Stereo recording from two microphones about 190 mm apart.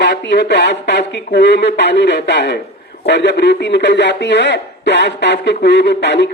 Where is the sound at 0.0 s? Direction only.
65° left (ahead or behind).